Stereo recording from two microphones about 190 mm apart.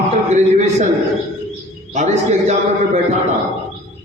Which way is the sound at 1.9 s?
40° right (ahead or behind).